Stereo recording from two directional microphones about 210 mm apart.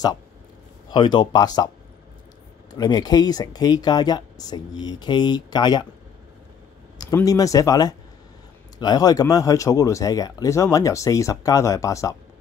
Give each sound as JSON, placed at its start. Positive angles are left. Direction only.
{"t": 0.8, "sound": "speech", "side_deg": 20}
{"t": 2.7, "sound": "speech", "side_deg": 20}
{"t": 7.0, "sound": "speech", "side_deg": 15}